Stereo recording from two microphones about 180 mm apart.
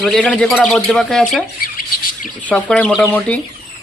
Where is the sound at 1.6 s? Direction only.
55° left (ahead or behind).